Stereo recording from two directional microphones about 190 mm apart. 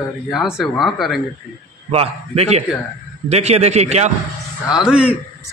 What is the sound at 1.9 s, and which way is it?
A man's voice, 30° right (ahead or behind).